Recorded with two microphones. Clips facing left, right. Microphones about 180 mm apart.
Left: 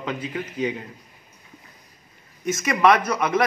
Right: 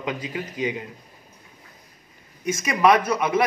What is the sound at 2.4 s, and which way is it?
Speech, 10° right (ahead or behind).